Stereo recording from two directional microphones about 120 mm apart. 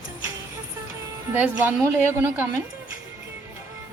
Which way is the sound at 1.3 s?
15° right (ahead or behind).